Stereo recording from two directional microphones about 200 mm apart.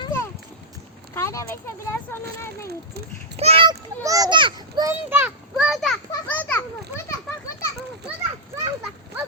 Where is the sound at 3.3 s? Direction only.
30° right (ahead or behind); by 6.7 s 10° left (ahead or behind).